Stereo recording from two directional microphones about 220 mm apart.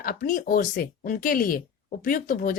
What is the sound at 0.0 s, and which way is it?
Speech, 40° left (ahead or behind).